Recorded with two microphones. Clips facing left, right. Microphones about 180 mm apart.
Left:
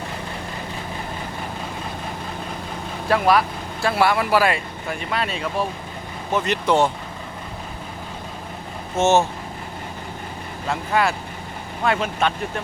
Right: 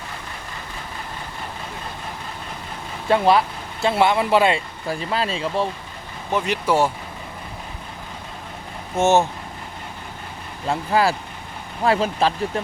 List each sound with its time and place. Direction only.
3.1 s speech: 25° right (ahead or behind)
6.3 s speech: 10° right (ahead or behind)
9.0 s speech: 15° right (ahead or behind)
10.7 s speech: 30° right (ahead or behind)